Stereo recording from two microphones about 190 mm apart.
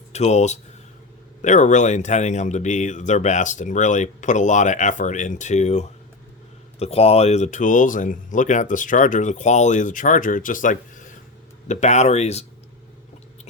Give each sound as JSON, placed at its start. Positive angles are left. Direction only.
{"t": 0.1, "sound": "speech", "side_deg": 35}